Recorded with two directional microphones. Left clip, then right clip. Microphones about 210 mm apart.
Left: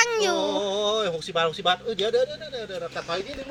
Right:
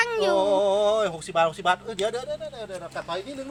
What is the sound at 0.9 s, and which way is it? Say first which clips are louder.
A man's voice: right 2 dB; 40° right (ahead or behind).